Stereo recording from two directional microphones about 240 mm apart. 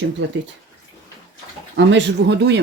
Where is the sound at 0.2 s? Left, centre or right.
Right.